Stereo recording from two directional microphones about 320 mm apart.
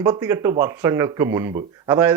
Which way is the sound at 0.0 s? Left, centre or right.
Centre.